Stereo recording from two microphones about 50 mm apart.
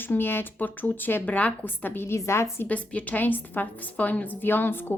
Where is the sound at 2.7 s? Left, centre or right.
Left.